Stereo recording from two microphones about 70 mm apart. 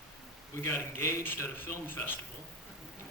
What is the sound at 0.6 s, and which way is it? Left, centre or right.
A man's voice, left.